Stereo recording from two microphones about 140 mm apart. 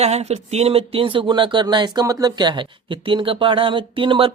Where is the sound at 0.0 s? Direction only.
50° right (ahead or behind).